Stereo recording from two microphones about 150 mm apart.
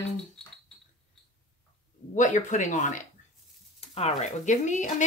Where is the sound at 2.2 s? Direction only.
55° left (ahead or behind).